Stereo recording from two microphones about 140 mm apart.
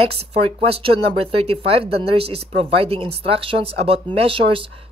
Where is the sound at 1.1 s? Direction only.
45° right (ahead or behind).